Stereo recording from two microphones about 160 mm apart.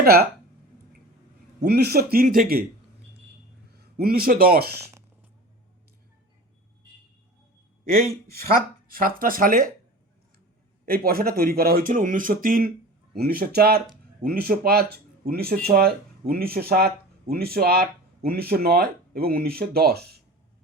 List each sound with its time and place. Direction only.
0.0 s speech: 70° right (ahead or behind)
1.6 s speech: 80° right; by 2.6 s 65° right (ahead or behind)
3.9 s speech: 70° right (ahead or behind)
8.3 s speech: 70° right (ahead or behind)
10.8 s speech: 70° right (ahead or behind)